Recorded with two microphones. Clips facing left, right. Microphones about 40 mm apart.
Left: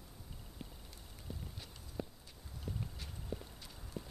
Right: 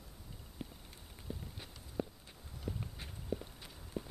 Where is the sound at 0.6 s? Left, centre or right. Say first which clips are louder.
Right 5 dB; centre.